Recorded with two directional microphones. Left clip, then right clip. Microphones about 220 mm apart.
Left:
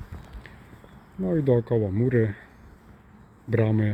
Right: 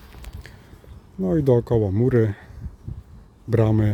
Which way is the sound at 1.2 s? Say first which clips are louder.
Right 4 dB; 20° right (ahead or behind).